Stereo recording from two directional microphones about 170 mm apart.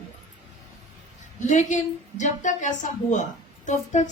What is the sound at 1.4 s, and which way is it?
A woman's voice, 45° left (ahead or behind).